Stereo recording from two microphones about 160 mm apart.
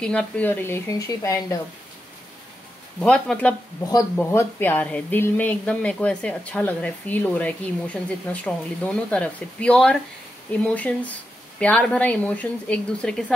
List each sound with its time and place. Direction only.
0.0 s speech: 5° left (ahead or behind)
3.0 s speech: 5° left (ahead or behind)